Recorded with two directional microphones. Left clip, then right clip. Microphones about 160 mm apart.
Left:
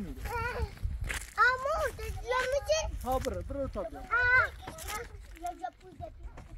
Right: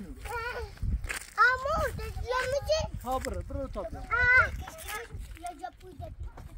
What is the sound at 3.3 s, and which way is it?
Speech, 85° left.